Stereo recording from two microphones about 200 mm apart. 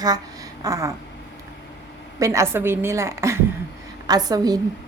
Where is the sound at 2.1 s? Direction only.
15° right (ahead or behind).